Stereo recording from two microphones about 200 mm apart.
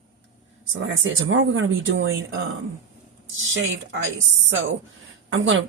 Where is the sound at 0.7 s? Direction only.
80° right.